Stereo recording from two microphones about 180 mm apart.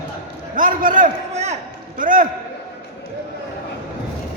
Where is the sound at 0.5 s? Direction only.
45° right (ahead or behind).